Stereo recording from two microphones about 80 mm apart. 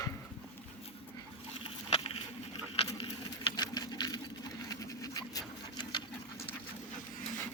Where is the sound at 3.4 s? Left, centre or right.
Left.